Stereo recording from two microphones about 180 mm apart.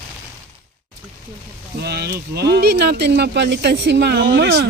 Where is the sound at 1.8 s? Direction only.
65° right (ahead or behind).